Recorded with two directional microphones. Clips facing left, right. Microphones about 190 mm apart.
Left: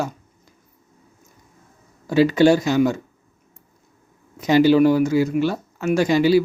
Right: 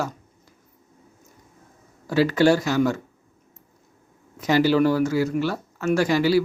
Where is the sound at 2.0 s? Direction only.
20° left (ahead or behind).